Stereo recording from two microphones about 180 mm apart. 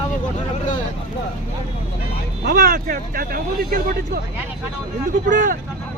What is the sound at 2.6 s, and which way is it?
Speech, 50° right (ahead or behind).